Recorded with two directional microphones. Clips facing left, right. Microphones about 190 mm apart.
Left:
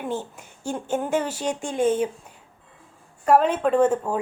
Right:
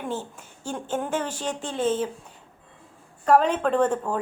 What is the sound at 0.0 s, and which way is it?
A woman's voice, 10° left (ahead or behind).